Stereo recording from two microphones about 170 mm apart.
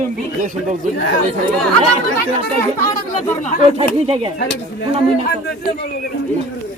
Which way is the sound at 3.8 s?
35° right (ahead or behind).